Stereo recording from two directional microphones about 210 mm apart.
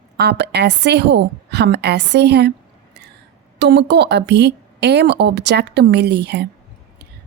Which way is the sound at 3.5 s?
55° right (ahead or behind).